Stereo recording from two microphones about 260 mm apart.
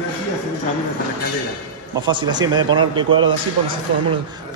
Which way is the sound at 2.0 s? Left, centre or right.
Centre.